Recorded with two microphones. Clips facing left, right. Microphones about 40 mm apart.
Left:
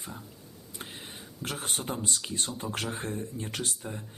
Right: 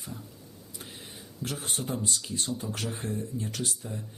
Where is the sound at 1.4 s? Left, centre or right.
Left.